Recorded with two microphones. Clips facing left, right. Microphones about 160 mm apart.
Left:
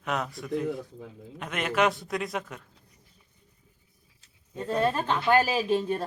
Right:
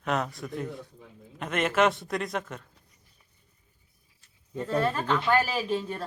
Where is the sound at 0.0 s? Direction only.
Centre (ahead or behind).